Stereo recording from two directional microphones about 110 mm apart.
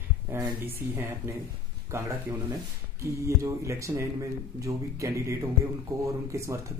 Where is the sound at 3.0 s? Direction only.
25° right (ahead or behind).